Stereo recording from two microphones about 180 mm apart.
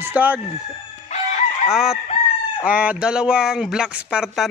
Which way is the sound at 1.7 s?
5° right (ahead or behind).